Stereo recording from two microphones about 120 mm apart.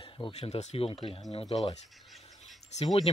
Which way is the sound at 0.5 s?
65° left (ahead or behind).